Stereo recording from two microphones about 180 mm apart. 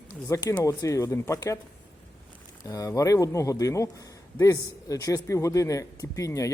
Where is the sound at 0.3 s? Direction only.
20° left (ahead or behind).